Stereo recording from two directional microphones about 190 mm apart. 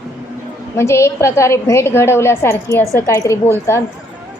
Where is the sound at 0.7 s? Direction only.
15° left (ahead or behind).